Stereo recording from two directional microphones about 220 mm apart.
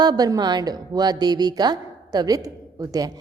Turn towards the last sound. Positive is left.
turn(degrees=-15)  # may be behind; listen again after turning